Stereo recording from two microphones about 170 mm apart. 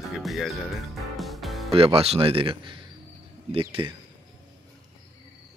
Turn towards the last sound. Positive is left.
turn(degrees=-30)  # may be behind; listen again after turning